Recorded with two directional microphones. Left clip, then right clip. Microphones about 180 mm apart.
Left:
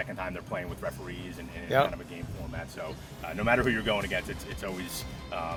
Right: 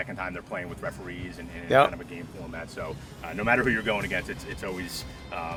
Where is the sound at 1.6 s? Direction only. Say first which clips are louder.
Right 5 dB; 50° right (ahead or behind).